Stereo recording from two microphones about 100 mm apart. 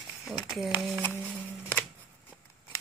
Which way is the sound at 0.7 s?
Centre (ahead or behind).